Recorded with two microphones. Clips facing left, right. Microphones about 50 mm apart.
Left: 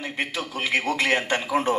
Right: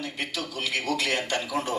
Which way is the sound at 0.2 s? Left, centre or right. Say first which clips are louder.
Left 5 dB; left.